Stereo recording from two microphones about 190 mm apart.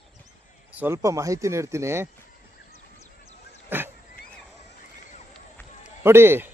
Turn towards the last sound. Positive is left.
turn(degrees=-10)  # may be behind; listen again after turning